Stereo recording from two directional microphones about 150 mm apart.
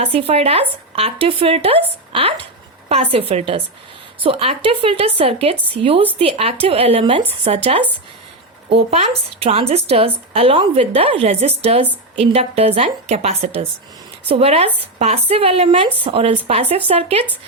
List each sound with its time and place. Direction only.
0.0 s a woman's voice: 40° right (ahead or behind)